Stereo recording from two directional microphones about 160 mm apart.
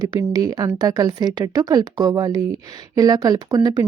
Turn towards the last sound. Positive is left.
turn(degrees=-25)  # may be behind; listen again after turning